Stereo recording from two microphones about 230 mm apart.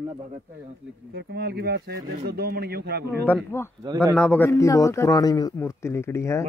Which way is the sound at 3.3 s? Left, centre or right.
Centre.